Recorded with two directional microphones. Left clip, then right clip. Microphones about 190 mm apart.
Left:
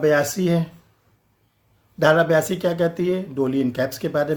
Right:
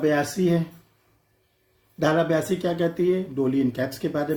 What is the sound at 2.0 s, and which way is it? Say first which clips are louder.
Speech: left 5 dB; 40° left (ahead or behind).